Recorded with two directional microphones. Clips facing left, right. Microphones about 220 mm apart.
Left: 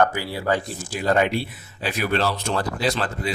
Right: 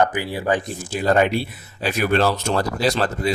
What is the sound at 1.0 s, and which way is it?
Speech, 40° right (ahead or behind).